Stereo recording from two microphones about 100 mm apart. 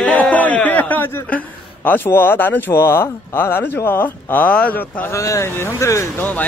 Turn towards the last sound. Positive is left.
turn(degrees=30)  # may be behind; listen again after turning